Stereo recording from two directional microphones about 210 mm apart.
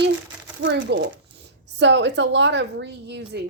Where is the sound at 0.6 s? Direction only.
60° right (ahead or behind).